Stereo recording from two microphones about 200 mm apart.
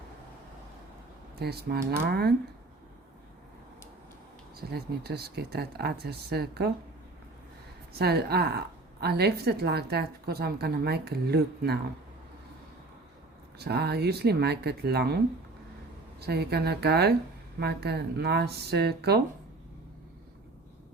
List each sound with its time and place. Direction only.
1.4 s a woman's voice: 55° right (ahead or behind)
4.7 s a woman's voice: 50° right (ahead or behind)
7.9 s a woman's voice: 55° right (ahead or behind)
13.6 s a woman's voice: 55° right (ahead or behind)
16.2 s a woman's voice: 55° right (ahead or behind)